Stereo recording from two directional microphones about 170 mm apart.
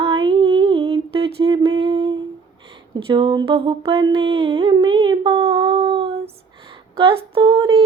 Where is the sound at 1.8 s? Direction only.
30° right (ahead or behind).